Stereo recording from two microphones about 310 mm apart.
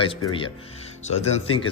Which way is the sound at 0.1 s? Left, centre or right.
Centre.